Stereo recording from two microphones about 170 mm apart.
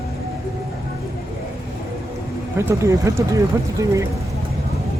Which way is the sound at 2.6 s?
15° right (ahead or behind).